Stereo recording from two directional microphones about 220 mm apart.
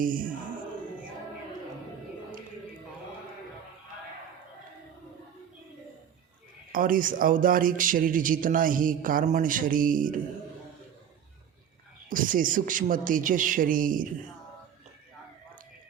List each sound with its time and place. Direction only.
0.0 s speech: 40° right (ahead or behind)
6.7 s speech: 40° right (ahead or behind)
12.0 s speech: 40° right (ahead or behind)